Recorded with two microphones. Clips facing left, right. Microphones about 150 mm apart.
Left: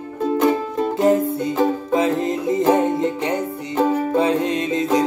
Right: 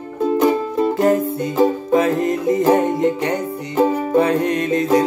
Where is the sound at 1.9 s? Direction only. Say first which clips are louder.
Right 3 dB; 20° left (ahead or behind).